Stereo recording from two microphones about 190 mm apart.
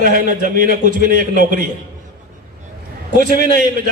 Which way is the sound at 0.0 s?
45° right (ahead or behind).